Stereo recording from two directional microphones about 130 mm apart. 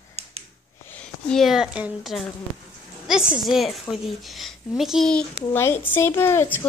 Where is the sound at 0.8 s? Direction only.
10° left (ahead or behind); by 2.1 s 10° right (ahead or behind).